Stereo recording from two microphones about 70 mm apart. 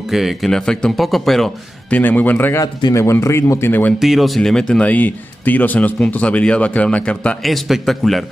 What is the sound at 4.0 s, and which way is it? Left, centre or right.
Speech, centre.